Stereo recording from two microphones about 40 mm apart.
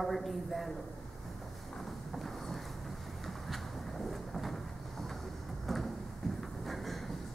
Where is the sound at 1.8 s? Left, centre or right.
Centre.